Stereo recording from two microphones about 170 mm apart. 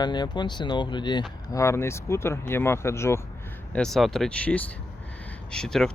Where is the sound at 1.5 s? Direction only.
15° left (ahead or behind).